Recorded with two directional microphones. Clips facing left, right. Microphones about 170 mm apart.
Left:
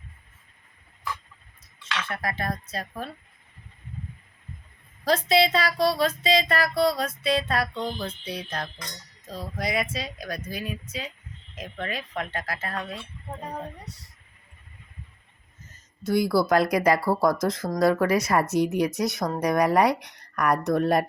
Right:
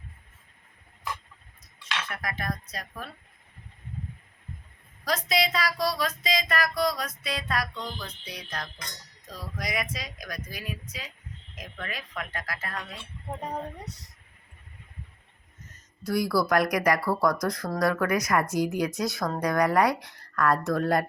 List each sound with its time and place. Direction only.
2.0 s speech: 30° left (ahead or behind)
5.0 s speech: 30° left (ahead or behind)
15.7 s speech: 25° left (ahead or behind)